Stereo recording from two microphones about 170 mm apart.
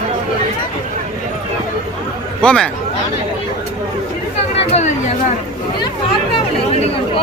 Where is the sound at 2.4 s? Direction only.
5° left (ahead or behind).